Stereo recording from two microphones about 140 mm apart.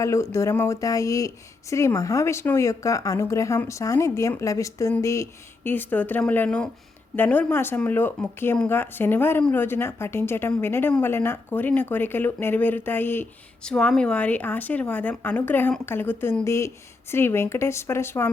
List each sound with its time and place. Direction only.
0.0 s a woman's voice: 20° left (ahead or behind)